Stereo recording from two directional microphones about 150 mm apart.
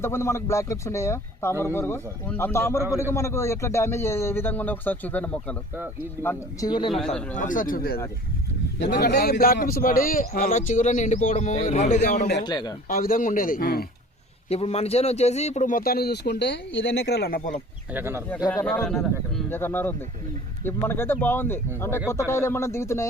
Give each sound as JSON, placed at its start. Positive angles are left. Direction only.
{"t": 0.0, "sound": "a man's voice", "side_deg": 15}
{"t": 6.2, "sound": "speech", "side_deg": 25}
{"t": 7.3, "sound": "speech", "side_deg": 60}
{"t": 12.4, "sound": "speech", "side_deg": 30}
{"t": 12.9, "sound": "speech", "side_deg": 70}
{"t": 14.5, "sound": "speech", "side_deg": 45}
{"t": 17.9, "sound": "speech", "side_deg": -15}
{"t": 18.5, "sound": "speech", "side_deg": 5}
{"t": 19.5, "sound": "a man's voice", "side_deg": 15}